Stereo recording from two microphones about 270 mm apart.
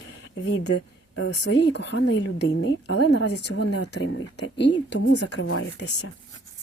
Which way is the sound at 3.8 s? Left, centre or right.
Left.